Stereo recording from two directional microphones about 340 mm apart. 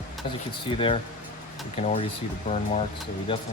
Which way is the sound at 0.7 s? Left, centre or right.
Centre.